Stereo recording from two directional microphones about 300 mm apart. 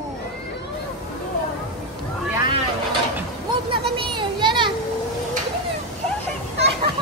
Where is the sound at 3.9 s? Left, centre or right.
Centre.